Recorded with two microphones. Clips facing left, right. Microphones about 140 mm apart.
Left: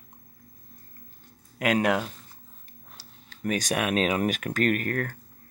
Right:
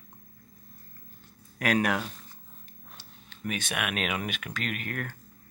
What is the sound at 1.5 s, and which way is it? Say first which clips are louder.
Speech: left 3 dB; 20° left (ahead or behind).